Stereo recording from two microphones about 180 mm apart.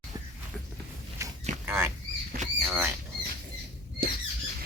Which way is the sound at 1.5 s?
40° right (ahead or behind).